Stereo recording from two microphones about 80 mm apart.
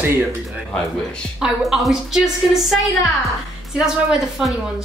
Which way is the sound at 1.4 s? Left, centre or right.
Centre.